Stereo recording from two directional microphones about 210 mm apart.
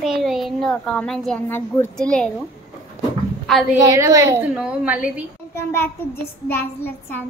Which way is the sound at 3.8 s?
15° right (ahead or behind).